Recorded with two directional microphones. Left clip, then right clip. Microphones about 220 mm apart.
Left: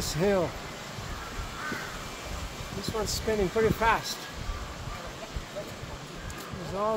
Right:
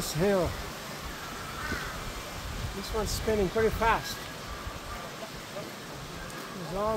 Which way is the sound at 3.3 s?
10° left (ahead or behind).